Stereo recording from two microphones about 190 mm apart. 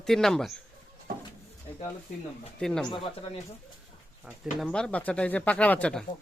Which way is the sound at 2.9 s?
25° left (ahead or behind).